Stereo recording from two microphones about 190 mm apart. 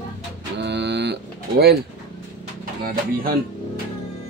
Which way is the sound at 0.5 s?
65° right (ahead or behind).